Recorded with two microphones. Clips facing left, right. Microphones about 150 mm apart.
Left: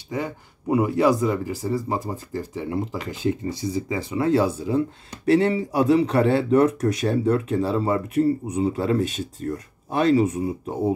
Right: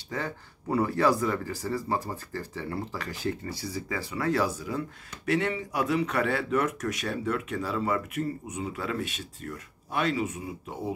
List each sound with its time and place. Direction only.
0.1 s speech: 15° left (ahead or behind); by 10.9 s 35° left (ahead or behind)